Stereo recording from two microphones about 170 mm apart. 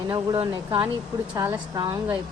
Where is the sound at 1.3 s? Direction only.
15° right (ahead or behind).